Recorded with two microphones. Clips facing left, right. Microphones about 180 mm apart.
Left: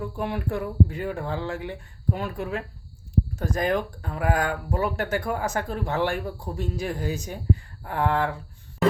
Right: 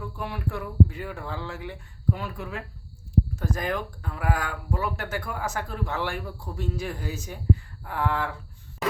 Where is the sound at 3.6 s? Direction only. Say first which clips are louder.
Left 5 dB; 45° left (ahead or behind).